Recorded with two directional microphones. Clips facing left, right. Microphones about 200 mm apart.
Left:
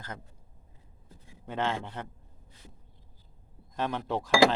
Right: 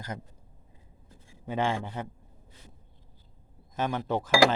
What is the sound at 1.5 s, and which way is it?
Speech, 10° right (ahead or behind).